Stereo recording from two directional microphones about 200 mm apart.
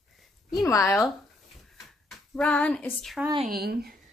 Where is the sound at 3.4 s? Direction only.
50° right (ahead or behind).